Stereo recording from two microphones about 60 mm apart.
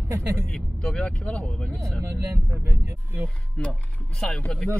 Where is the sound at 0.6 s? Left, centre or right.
Centre.